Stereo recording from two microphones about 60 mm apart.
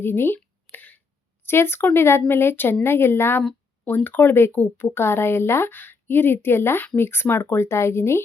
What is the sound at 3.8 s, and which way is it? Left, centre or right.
Speech, left.